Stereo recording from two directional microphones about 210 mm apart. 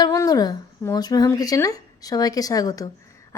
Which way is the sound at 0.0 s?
20° left (ahead or behind).